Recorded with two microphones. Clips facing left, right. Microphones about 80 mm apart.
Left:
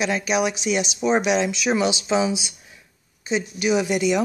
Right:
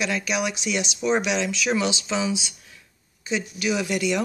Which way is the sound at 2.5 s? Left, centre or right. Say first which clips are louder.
Left 1 dB; centre.